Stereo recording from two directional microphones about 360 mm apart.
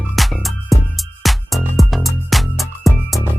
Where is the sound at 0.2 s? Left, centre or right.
Centre.